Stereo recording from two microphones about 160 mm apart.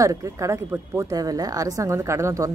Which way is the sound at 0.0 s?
20° right (ahead or behind).